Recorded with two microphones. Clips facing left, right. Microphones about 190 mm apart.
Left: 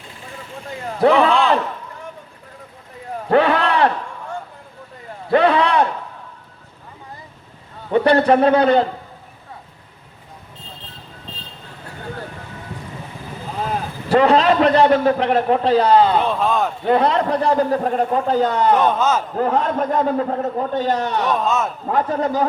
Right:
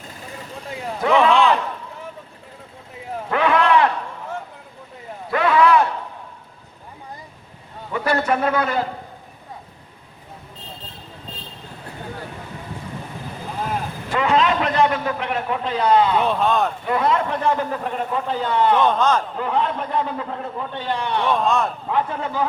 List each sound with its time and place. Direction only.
1.0 s a man's voice: 35° left (ahead or behind)
3.2 s a sound: 35° left (ahead or behind)
5.3 s a sound: 30° left (ahead or behind)
7.9 s a man's voice: 30° left (ahead or behind)
14.1 s a man's voice: 35° left (ahead or behind)
16.2 s speech: centre (ahead or behind)
16.8 s a man's voice: 35° left (ahead or behind)
18.9 s a man's voice: 5° left (ahead or behind)
19.4 s a man's voice: 45° left (ahead or behind)
21.3 s speech: 5° left (ahead or behind)
21.8 s a man's voice: 40° left (ahead or behind)